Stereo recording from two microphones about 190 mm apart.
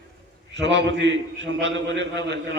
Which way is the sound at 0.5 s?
65° right (ahead or behind).